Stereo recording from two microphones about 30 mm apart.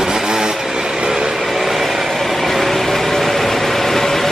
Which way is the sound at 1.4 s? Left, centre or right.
Centre.